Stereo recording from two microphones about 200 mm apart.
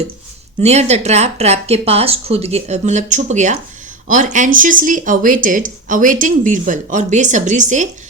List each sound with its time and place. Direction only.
0.6 s speech: 35° right (ahead or behind)